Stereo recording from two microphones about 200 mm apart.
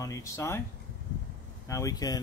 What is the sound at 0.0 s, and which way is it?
Speech, 15° left (ahead or behind).